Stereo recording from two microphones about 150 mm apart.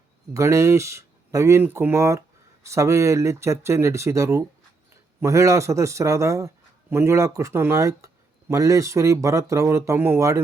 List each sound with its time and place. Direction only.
0.3 s speech: 20° right (ahead or behind)